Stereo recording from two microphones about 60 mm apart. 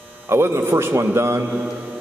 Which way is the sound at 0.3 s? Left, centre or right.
Right.